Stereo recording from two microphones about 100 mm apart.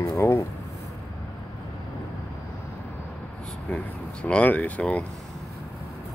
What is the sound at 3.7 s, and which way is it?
Speech, 10° left (ahead or behind).